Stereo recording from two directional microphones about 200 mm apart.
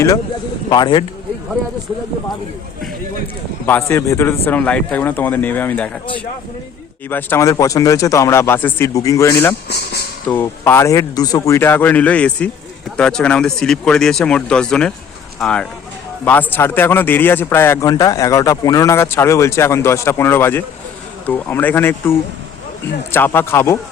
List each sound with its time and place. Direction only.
0.7 s speech: 25° left (ahead or behind)
3.7 s a man's voice: 10° left (ahead or behind)
7.1 s a man's voice: 10° left (ahead or behind)
23.1 s a man's voice: 10° left (ahead or behind)